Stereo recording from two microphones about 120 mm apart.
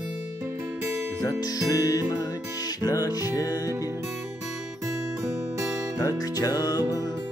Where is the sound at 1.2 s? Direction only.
30° left (ahead or behind).